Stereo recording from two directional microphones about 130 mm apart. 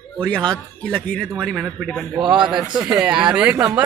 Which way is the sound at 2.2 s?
35° right (ahead or behind).